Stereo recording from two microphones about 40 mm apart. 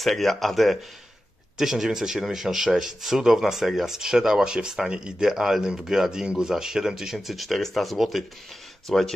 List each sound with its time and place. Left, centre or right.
0.0 s speech: centre
4.8 s speech: right
5.2 s speech: centre
8.8 s speech: centre